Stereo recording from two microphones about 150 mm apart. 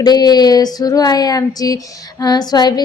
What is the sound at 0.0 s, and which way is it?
Speech, 25° left (ahead or behind).